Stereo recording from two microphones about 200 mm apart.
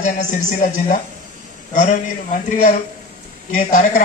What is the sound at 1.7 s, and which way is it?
Speech, 40° left (ahead or behind).